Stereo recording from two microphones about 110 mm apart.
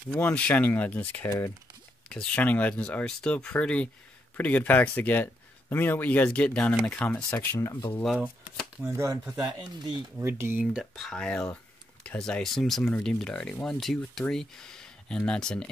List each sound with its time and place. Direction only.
0.1 s speech: 10° left (ahead or behind)
7.5 s speech: 30° left (ahead or behind)
8.8 s speech: 25° right (ahead or behind)
10.6 s speech: 5° right (ahead or behind)
11.0 s speech: 5° left (ahead or behind)